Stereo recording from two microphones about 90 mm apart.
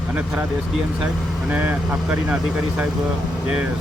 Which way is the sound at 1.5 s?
20° right (ahead or behind).